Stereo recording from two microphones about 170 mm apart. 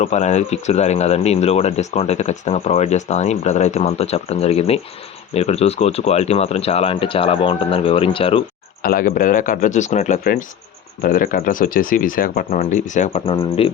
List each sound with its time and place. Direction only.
0.0 s speech: 40° left (ahead or behind)
8.8 s speech: 55° left (ahead or behind)
11.0 s speech: 55° left (ahead or behind)
12.5 s speech: 45° left (ahead or behind)
13.2 s speech: 30° left (ahead or behind)